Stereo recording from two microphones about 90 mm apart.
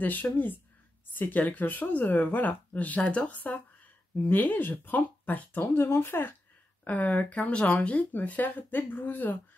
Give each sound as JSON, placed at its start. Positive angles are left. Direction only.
{"t": 0.0, "sound": "speech", "side_deg": 20}